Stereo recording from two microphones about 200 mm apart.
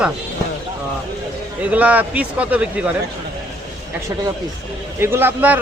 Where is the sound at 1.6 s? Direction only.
5° right (ahead or behind).